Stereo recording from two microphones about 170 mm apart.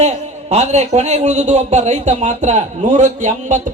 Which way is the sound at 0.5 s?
40° right (ahead or behind).